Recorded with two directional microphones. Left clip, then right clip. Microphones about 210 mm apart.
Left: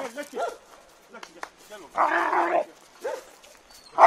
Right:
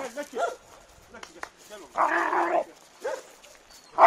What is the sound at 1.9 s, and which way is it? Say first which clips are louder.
Dog: left 2 dB; 40° left (ahead or behind).